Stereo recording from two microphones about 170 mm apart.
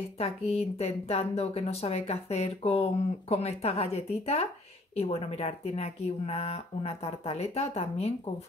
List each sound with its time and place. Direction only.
0.2 s speech: 35° left (ahead or behind)